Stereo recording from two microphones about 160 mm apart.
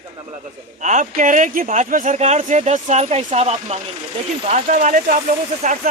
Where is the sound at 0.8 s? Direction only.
50° right (ahead or behind).